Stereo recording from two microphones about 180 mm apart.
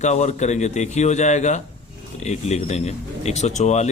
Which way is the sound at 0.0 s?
40° left (ahead or behind).